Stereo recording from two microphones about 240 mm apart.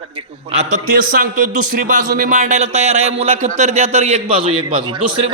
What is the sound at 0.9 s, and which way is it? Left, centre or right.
Speech, right.